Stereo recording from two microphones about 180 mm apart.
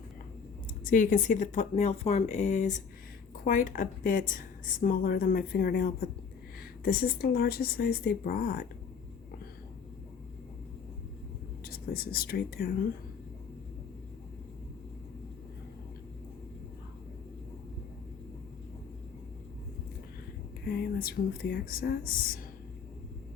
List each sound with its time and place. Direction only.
0.9 s a woman's voice: 50° left (ahead or behind)
11.6 s speech: 60° left (ahead or behind)
20.7 s a woman's voice: 60° left (ahead or behind)